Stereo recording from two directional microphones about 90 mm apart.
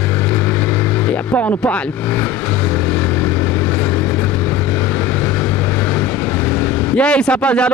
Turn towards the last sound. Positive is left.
turn(degrees=10)  # may be behind; listen again after turning